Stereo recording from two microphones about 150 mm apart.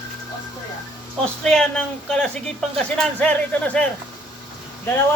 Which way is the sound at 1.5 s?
5° left (ahead or behind).